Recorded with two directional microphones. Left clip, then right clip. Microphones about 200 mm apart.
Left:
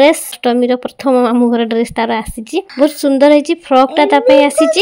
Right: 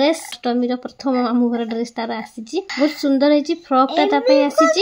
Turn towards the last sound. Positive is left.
turn(degrees=30)  # may be behind; listen again after turning